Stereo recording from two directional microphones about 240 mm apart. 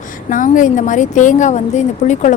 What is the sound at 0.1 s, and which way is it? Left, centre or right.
A woman's voice, left.